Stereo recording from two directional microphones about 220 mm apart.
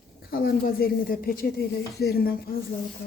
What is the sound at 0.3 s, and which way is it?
Speech, 45° left (ahead or behind).